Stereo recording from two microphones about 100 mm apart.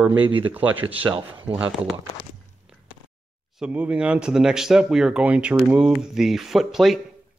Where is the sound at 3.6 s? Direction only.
15° right (ahead or behind).